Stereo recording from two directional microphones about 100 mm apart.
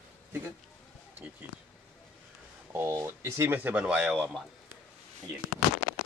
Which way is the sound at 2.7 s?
25° right (ahead or behind).